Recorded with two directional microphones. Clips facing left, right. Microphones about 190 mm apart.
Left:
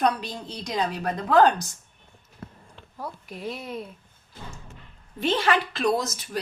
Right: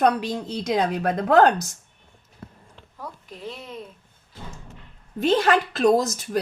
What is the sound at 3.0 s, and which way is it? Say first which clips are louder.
Speech: left 2 dB; 10° left (ahead or behind).